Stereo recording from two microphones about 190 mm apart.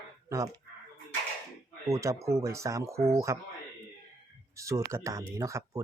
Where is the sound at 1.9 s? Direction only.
15° right (ahead or behind).